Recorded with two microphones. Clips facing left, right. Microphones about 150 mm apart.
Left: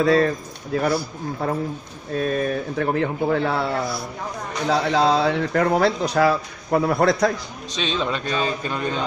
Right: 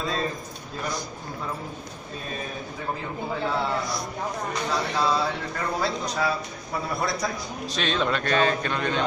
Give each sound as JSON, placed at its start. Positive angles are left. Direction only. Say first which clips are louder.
{"t": 0.0, "sound": "a man's voice", "louder": "left 11 dB", "side_deg": 70}
{"t": 4.6, "sound": "speech", "louder": "left 8 dB", "side_deg": 65}
{"t": 7.7, "sound": "a man's voice", "louder": "left 1 dB", "side_deg": 0}